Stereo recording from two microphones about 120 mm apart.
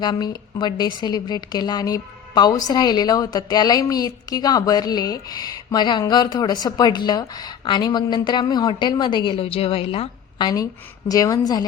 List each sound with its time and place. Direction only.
0.0 s a woman's voice: 35° left (ahead or behind)